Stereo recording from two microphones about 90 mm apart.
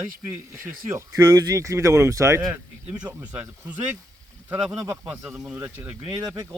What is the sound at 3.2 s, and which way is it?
Speech, 15° right (ahead or behind).